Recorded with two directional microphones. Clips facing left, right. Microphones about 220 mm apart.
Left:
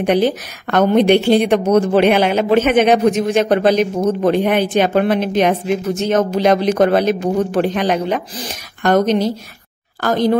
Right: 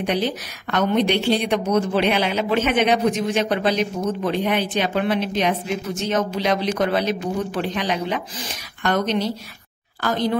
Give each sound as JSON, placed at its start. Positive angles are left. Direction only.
{"t": 0.0, "sound": "speech", "side_deg": 50}